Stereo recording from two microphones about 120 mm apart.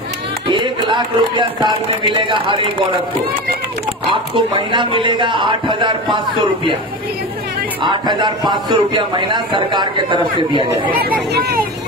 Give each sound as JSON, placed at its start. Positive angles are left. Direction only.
{"t": 0.5, "sound": "a man's voice", "side_deg": -40}
{"t": 4.4, "sound": "a man's voice", "side_deg": -45}
{"t": 7.8, "sound": "a man's voice", "side_deg": -40}